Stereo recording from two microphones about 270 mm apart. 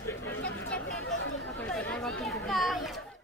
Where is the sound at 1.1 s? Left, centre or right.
Left.